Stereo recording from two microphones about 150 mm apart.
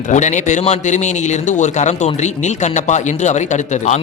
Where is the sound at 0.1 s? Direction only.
55° left (ahead or behind).